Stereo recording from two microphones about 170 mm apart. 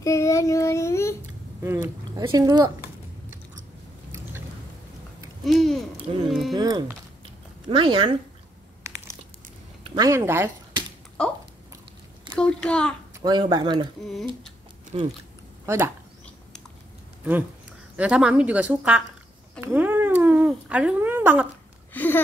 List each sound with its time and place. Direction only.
0.0 s child singing: 20° left (ahead or behind)
1.6 s speech: 15° right (ahead or behind)
5.4 s hoot: centre (ahead or behind)
6.5 s speech: 25° right (ahead or behind)
8.8 s a sound: 15° right (ahead or behind)
9.8 s a woman's voice: 20° right (ahead or behind)
12.4 s a child's voice: 5° left (ahead or behind)
13.1 s speech: 25° right (ahead or behind)
14.9 s speech: 35° right (ahead or behind)
15.6 s speech: 15° right (ahead or behind)
17.2 s a woman's voice: 10° right (ahead or behind)
19.6 s cat: 10° right (ahead or behind)
21.9 s a sound: 10° left (ahead or behind)